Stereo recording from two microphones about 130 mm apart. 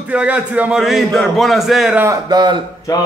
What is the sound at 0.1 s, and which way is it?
A man's voice, 10° right (ahead or behind).